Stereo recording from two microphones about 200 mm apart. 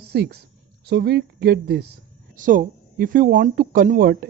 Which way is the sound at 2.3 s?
40° right (ahead or behind).